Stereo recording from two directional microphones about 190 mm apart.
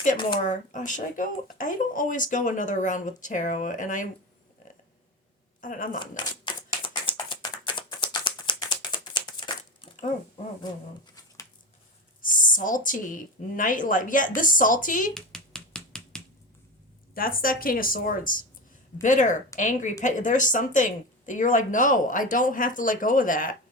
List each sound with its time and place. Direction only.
0.4 s speech: 40° left (ahead or behind)
5.5 s speech: 45° left (ahead or behind)
6.1 s a sound: 25° left (ahead or behind)
9.8 s speech: 30° left (ahead or behind)
12.2 s speech: 45° left (ahead or behind)
15.1 s finger snapping: 5° left (ahead or behind)
17.2 s speech: 50° left (ahead or behind)